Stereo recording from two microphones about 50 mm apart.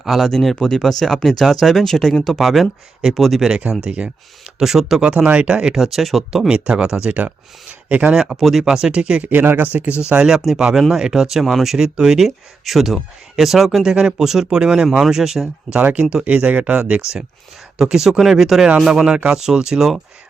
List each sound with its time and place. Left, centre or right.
0.0 s speech: centre
0.3 s speech: centre
4.6 s speech: centre
5.7 s speech: centre
6.5 s speech: centre
7.1 s speech: right
8.1 s speech: centre
8.4 s speech: centre
8.6 s speech: centre
9.4 s speech: right
9.7 s speech: right; by 15.8 s centre
15.8 s speech: right
17.7 s speech: centre
18.9 s speech: centre